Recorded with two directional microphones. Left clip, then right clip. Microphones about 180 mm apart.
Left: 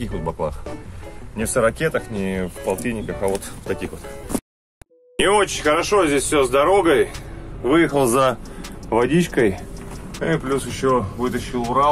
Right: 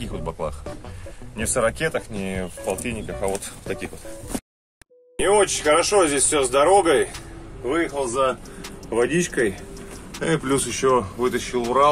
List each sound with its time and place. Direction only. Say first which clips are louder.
0.0 s speech: left 4 dB; 5° left (ahead or behind)
7.7 s a man's voice: left 7 dB; 40° left (ahead or behind)
8.9 s speech: left 3 dB; 20° left (ahead or behind)
10.2 s speech: left 1 dB; 25° right (ahead or behind)
10.5 s speech: right 1 dB; 40° right (ahead or behind)